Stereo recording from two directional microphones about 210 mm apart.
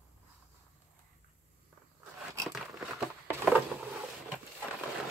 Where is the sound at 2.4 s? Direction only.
Centre (ahead or behind).